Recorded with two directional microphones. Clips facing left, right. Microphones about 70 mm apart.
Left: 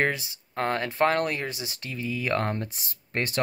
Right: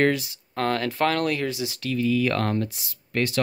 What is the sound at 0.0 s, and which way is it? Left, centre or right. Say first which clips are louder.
Speech: right 5 dB; left.